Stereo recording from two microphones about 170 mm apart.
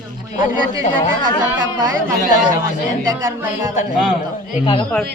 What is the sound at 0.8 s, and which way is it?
Speech, 30° left (ahead or behind).